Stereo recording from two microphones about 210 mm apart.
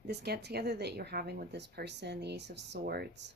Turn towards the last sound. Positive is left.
turn(degrees=-50)  # may be behind; listen again after turning